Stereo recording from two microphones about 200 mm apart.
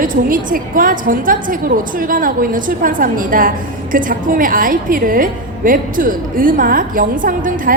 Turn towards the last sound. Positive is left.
turn(degrees=-45)  # may be behind; listen again after turning